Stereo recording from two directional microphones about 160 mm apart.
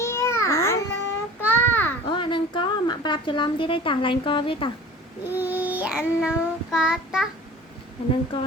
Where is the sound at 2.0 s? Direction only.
30° left (ahead or behind).